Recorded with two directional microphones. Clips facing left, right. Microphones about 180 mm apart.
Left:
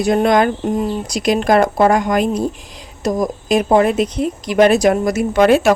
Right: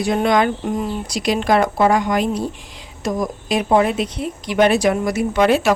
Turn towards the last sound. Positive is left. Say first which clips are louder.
# left 4 dB
turn(degrees=45)  # may be behind; listen again after turning